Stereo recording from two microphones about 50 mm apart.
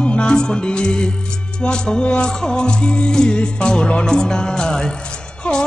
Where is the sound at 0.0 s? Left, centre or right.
Left.